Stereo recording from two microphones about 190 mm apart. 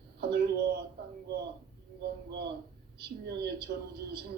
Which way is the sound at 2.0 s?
60° right (ahead or behind).